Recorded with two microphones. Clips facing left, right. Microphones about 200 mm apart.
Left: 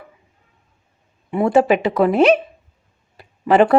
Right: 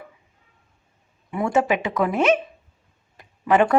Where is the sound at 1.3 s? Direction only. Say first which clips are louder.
Left 6 dB; 30° left (ahead or behind).